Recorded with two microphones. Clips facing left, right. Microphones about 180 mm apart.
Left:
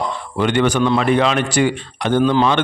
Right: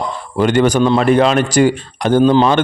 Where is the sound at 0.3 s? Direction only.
40° right (ahead or behind).